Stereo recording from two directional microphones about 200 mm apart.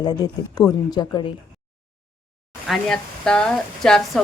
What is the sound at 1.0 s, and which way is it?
Speech, 20° left (ahead or behind).